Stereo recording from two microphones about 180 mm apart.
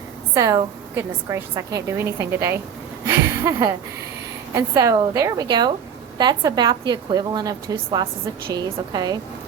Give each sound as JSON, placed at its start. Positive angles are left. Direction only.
{"t": 0.3, "sound": "a woman's voice", "side_deg": -20}